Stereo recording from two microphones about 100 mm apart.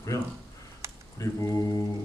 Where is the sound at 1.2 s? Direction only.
35° left (ahead or behind).